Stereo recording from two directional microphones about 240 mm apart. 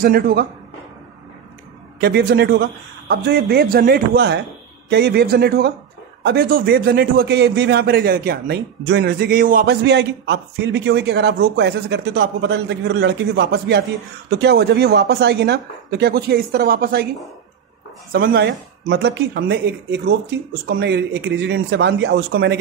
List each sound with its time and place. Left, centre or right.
0.0 s a man's voice: right
2.0 s a man's voice: right
18.1 s a man's voice: right